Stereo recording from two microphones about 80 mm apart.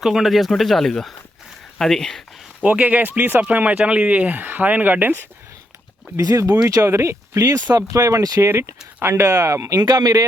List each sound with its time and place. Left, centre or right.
0.0 s speech: centre
2.6 s speech: centre
6.1 s speech: right
9.7 s a man's voice: right